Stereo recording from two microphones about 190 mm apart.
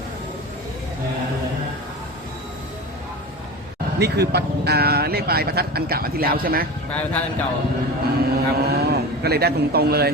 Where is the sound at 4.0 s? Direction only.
60° right (ahead or behind).